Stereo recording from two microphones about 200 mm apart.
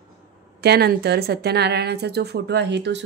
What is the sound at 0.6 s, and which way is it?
A woman's voice, 55° right (ahead or behind).